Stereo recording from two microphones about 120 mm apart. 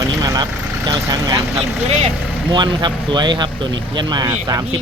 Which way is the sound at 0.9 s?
35° right (ahead or behind).